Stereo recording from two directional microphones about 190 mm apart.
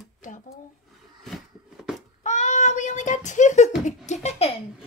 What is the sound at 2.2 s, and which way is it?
Child singing, 40° left (ahead or behind).